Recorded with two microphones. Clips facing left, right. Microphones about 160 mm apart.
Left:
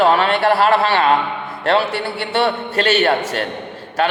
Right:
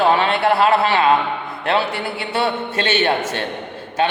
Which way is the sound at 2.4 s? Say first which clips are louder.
Left 3 dB; 20° right (ahead or behind).